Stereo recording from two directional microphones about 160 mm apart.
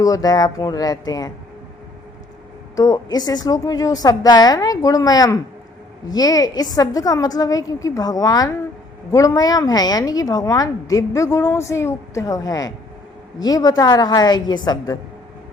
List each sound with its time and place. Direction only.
0.0 s a woman's voice: 20° left (ahead or behind)
2.7 s a woman's voice: 25° left (ahead or behind)